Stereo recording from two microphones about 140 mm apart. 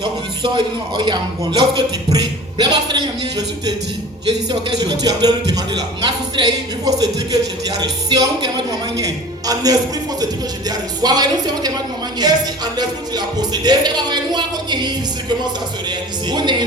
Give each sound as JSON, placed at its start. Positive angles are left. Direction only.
{"t": 0.0, "sound": "a man's voice", "side_deg": -35}